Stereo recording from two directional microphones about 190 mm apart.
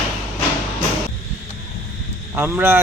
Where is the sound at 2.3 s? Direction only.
10° right (ahead or behind).